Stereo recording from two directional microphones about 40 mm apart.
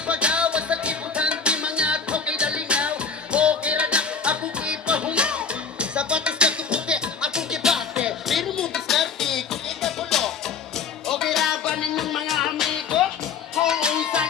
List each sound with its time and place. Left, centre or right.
0.1 s music: right; by 8.1 s centre
8.7 s music: centre; by 14.3 s right